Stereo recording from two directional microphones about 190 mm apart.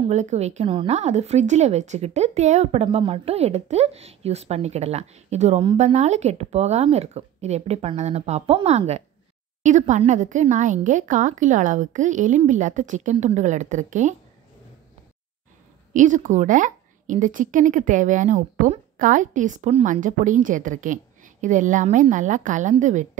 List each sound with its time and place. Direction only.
0.0 s speech: 35° right (ahead or behind)
15.9 s speech: 40° right (ahead or behind)